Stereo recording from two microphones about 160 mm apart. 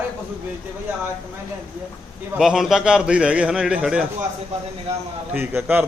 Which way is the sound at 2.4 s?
Centre (ahead or behind).